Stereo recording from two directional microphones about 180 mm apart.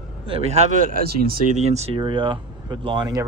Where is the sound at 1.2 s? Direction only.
55° right (ahead or behind).